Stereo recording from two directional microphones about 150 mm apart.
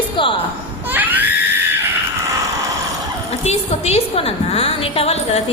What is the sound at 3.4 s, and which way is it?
A woman's voice, 45° left (ahead or behind).